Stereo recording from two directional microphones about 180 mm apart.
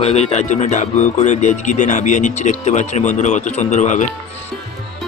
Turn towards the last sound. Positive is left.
turn(degrees=40)  # may be behind; listen again after turning